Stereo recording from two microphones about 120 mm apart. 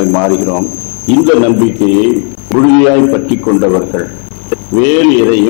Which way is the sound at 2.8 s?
15° left (ahead or behind).